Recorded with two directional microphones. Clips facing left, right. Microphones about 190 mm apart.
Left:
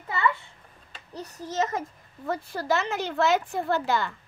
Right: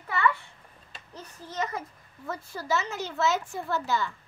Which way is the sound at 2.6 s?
60° left (ahead or behind).